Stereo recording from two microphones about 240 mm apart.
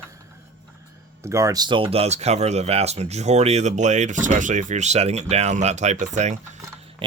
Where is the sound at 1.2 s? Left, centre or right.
Centre.